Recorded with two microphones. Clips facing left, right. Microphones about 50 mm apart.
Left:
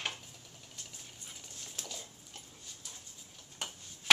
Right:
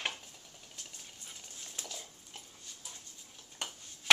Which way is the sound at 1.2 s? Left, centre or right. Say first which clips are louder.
Even; centre.